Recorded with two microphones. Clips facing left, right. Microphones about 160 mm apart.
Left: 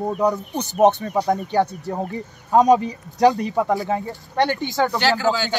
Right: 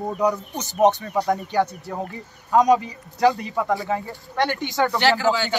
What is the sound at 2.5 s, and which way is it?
Speech, 40° left (ahead or behind).